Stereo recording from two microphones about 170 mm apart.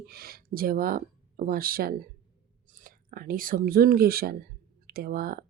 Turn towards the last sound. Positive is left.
turn(degrees=-60)  # may be behind; listen again after turning